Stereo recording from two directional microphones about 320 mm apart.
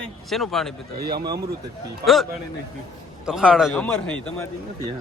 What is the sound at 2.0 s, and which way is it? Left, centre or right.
A man's voice, centre.